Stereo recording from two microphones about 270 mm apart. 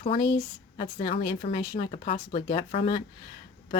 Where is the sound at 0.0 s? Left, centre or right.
Centre.